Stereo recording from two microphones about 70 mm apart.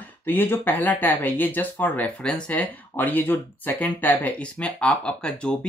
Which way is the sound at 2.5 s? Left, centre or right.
Left.